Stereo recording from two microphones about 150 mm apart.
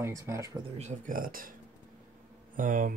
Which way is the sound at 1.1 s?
70° right (ahead or behind).